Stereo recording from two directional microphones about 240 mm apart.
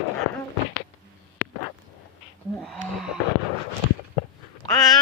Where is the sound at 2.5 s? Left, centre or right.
Centre.